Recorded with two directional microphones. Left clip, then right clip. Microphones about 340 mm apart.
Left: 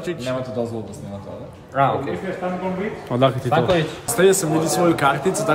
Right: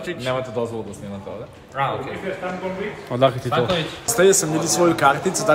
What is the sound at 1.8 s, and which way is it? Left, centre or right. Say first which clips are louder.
Speech: left 5 dB; left.